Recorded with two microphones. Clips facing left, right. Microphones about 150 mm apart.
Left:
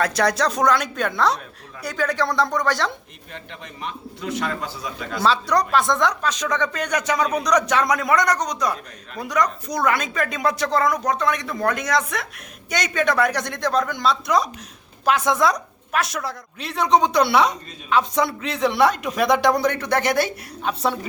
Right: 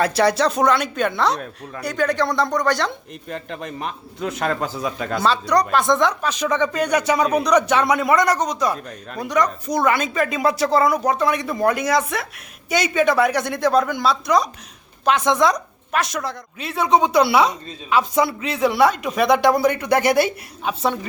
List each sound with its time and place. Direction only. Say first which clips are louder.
0.0 s a woman's voice: right 3 dB; 5° right (ahead or behind)
3.3 s speech: right 8 dB; 40° right (ahead or behind)
5.2 s a woman's voice: right 1 dB; centre (ahead or behind)